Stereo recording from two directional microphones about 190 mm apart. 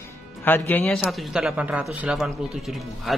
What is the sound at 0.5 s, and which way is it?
Speech, 10° left (ahead or behind).